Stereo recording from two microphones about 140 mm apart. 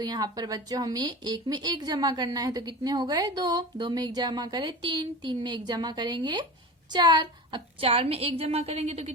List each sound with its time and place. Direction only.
0.0 s a woman's voice: 30° right (ahead or behind); by 9.1 s 50° right (ahead or behind)